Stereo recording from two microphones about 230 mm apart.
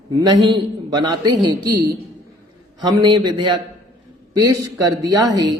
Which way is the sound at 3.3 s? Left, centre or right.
Centre.